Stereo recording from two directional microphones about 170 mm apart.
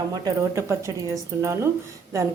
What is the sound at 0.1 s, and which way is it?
A woman's voice, 20° right (ahead or behind).